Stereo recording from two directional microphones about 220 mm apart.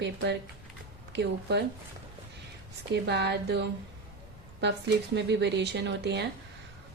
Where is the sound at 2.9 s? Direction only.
50° right (ahead or behind).